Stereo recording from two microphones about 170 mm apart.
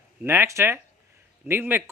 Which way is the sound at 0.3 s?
15° right (ahead or behind).